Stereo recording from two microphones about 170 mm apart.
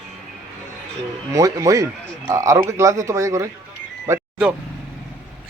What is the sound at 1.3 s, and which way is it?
Speech, 20° right (ahead or behind).